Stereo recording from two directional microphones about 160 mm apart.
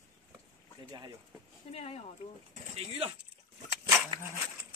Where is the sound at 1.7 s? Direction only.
40° left (ahead or behind).